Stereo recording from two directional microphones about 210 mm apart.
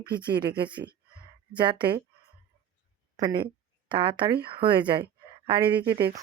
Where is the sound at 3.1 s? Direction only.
20° right (ahead or behind).